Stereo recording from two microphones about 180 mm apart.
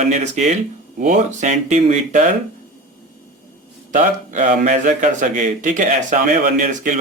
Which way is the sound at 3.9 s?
45° right (ahead or behind).